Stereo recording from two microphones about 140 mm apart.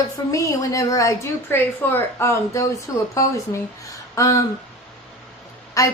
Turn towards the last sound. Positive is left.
turn(degrees=25)  # may be behind; listen again after turning